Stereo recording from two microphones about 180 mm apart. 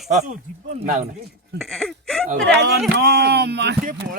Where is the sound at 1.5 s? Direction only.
Centre (ahead or behind).